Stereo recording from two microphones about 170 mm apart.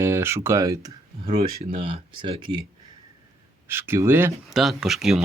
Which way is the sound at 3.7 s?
15° right (ahead or behind).